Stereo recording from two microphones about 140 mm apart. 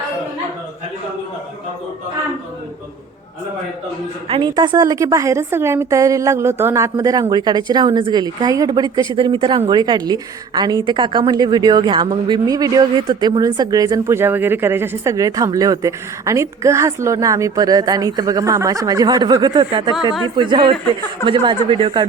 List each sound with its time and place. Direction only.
4.3 s a woman's voice: 35° right (ahead or behind)